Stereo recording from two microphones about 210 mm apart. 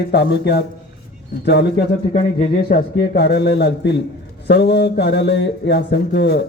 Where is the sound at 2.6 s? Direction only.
45° left (ahead or behind).